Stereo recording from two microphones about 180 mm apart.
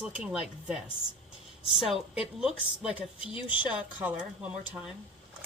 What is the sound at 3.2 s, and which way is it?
Speech, 30° left (ahead or behind).